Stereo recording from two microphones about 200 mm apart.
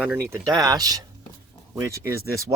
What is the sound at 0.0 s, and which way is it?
Speech, 10° right (ahead or behind).